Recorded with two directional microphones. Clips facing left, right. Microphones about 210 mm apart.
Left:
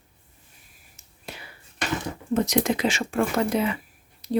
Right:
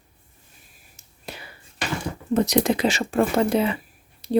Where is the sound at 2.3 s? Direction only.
35° right (ahead or behind).